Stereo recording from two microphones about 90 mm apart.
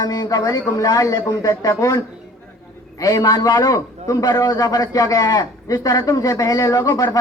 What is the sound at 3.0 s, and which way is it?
A man's voice, 40° left (ahead or behind).